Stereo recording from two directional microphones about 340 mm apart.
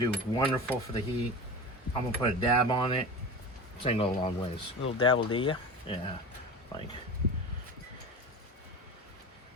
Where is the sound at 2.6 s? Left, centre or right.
Centre.